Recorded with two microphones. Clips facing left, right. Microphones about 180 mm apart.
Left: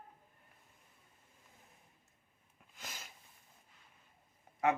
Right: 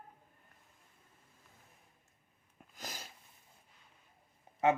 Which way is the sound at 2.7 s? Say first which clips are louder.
Right 4 dB; 35° right (ahead or behind).